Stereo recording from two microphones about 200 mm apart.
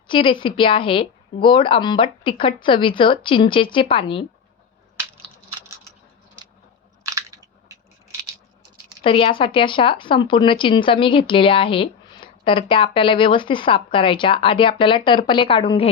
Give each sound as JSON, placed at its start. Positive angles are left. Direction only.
{"t": 0.1, "sound": "speech", "side_deg": 25}
{"t": 7.0, "sound": "biting", "side_deg": -15}
{"t": 9.0, "sound": "speech", "side_deg": 25}